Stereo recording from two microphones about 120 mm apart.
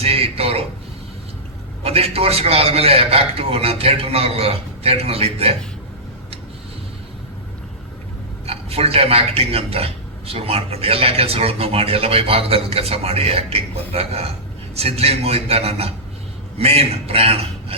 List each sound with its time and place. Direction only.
0.0 s a sound: 55° right (ahead or behind)
1.8 s a man's voice: 55° right (ahead or behind)
8.4 s a man's voice: 55° right (ahead or behind)